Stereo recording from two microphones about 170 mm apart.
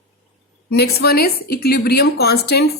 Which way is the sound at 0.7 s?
70° left (ahead or behind).